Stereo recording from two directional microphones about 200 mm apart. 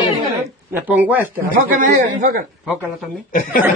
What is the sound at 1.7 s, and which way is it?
Speech, 40° right (ahead or behind).